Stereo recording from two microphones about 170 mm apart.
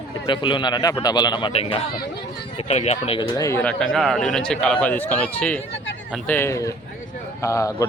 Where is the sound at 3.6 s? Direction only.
5° left (ahead or behind).